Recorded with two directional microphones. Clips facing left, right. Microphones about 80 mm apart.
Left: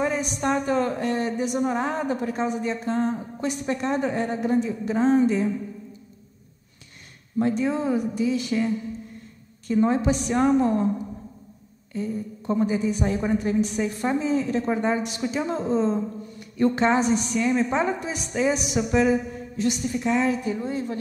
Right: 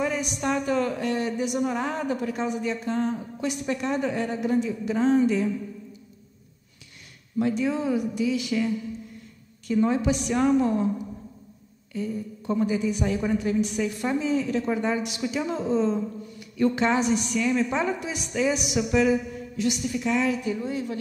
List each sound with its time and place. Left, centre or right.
0.0 s a woman's voice: left
7.3 s a woman's voice: left